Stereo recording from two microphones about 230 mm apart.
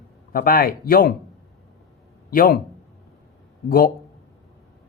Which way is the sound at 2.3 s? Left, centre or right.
Left.